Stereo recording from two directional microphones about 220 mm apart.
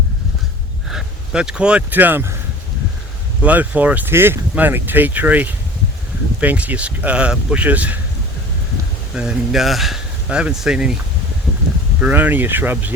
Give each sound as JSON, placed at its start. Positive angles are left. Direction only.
{"t": 0.9, "sound": "speech", "side_deg": -5}
{"t": 3.4, "sound": "speech", "side_deg": -5}
{"t": 9.1, "sound": "speech", "side_deg": -5}
{"t": 11.9, "sound": "speech", "side_deg": -5}